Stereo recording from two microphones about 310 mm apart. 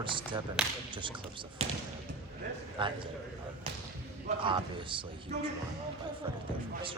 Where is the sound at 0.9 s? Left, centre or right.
Centre.